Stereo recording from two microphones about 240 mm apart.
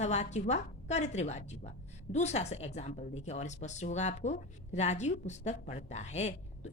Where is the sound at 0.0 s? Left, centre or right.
Left.